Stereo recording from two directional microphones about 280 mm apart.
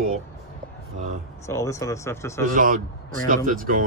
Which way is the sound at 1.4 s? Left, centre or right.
Centre.